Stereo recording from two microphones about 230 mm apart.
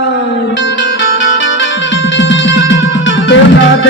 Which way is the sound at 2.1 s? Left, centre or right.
Left.